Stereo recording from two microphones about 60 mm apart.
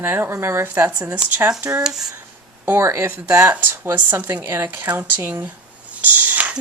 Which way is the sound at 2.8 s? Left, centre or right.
Right.